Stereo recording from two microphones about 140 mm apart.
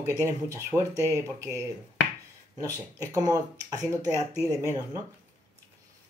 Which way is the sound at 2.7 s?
25° right (ahead or behind).